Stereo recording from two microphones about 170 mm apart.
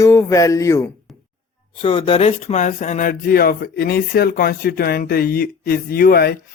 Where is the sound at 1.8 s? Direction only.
30° left (ahead or behind); by 6.4 s 65° left (ahead or behind).